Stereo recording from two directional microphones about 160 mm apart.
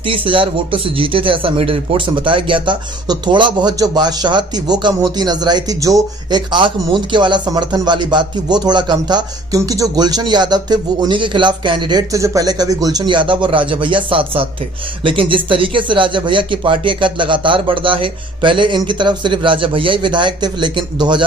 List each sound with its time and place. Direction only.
0.0 s speech: 35° right (ahead or behind)